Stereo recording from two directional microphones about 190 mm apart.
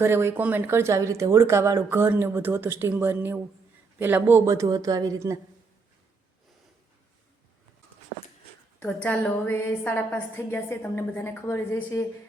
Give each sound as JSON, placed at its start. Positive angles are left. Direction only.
{"t": 0.0, "sound": "speech", "side_deg": -15}
{"t": 8.8, "sound": "a woman's voice", "side_deg": 5}